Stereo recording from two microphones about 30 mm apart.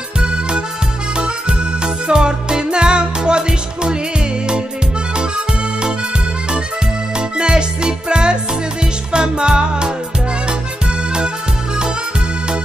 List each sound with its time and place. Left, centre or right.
0.2 s music: right
7.2 s music: right